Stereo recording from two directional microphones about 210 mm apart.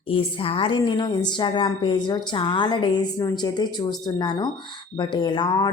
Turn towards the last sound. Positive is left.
turn(degrees=20)  # may be behind; listen again after turning